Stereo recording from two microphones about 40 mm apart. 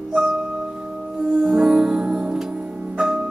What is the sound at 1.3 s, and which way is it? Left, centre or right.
Music, right.